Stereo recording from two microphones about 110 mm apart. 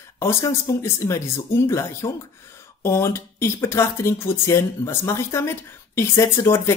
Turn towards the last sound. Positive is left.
turn(degrees=25)  # may be behind; listen again after turning